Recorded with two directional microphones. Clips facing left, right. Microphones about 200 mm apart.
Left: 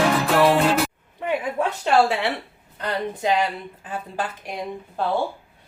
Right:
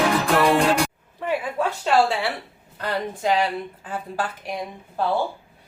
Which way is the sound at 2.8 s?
20° left (ahead or behind).